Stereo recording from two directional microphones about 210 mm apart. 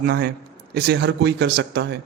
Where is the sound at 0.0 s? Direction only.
50° right (ahead or behind).